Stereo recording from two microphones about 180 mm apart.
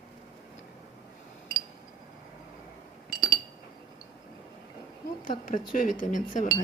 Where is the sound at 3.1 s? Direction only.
20° left (ahead or behind).